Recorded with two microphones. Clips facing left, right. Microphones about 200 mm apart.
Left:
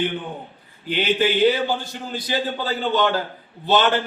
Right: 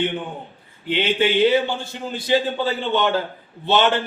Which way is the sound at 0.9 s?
25° right (ahead or behind).